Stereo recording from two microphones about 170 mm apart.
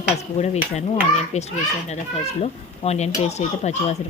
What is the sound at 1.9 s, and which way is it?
Speech, 40° left (ahead or behind).